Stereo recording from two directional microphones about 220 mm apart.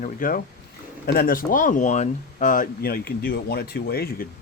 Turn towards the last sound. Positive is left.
turn(degrees=45)  # may be behind; listen again after turning